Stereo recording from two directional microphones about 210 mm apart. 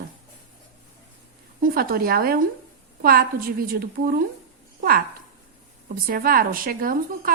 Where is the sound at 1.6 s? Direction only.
45° right (ahead or behind).